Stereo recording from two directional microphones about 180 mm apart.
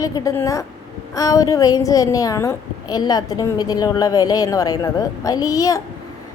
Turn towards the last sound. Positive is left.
turn(degrees=20)  # may be behind; listen again after turning